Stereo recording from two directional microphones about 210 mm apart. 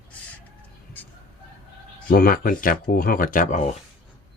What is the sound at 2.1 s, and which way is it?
Speech, 45° left (ahead or behind).